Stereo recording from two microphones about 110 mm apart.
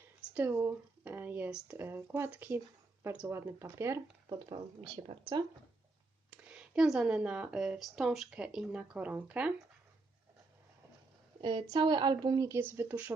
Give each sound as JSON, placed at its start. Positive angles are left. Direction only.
{"t": 0.2, "sound": "a sound", "side_deg": -10}
{"t": 0.5, "sound": "speech", "side_deg": -20}
{"t": 4.3, "sound": "speech", "side_deg": -40}
{"t": 6.3, "sound": "speech", "side_deg": -10}
{"t": 11.3, "sound": "a woman's voice", "side_deg": -45}
{"t": 12.5, "sound": "speech", "side_deg": -20}